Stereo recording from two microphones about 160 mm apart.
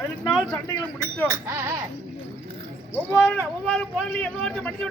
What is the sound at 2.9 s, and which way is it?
A man's voice, 15° left (ahead or behind).